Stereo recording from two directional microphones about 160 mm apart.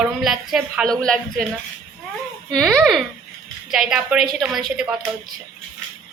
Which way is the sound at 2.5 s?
5° left (ahead or behind).